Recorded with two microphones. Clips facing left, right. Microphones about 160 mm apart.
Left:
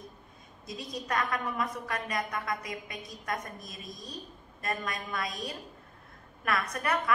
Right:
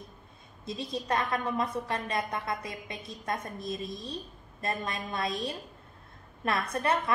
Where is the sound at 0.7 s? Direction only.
30° right (ahead or behind).